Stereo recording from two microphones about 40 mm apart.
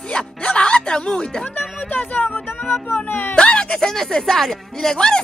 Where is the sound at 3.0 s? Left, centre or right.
Left.